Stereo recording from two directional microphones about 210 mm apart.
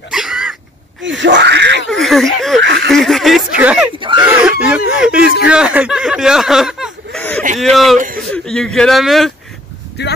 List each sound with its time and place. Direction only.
0.1 s throat clearing: centre (ahead or behind)
1.0 s wheeze: 60° right (ahead or behind)
1.9 s a sound: centre (ahead or behind)
2.6 s a sound: 55° right (ahead or behind)
2.9 s speech: centre (ahead or behind)
4.2 s chicken: 5° right (ahead or behind)
5.5 s speech: 5° right (ahead or behind)
7.2 s a sound: 5° left (ahead or behind)
7.4 s speech: 35° right (ahead or behind)
7.7 s speech: centre (ahead or behind)
10.0 s speech: 55° left (ahead or behind)